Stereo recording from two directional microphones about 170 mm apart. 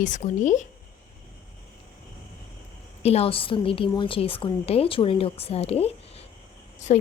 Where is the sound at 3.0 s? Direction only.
35° left (ahead or behind).